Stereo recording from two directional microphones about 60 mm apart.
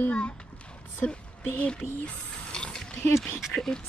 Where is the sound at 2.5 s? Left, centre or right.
Centre.